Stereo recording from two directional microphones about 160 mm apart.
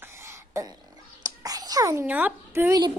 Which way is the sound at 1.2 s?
25° right (ahead or behind).